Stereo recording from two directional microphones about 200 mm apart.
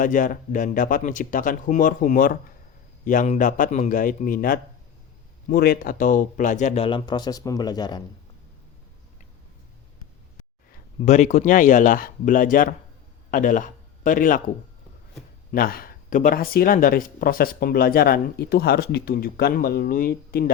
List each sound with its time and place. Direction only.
0.0 s speech: 40° left (ahead or behind); by 8.0 s 20° left (ahead or behind)
11.0 s a man's voice: 35° left (ahead or behind)
15.5 s speech: 45° left (ahead or behind)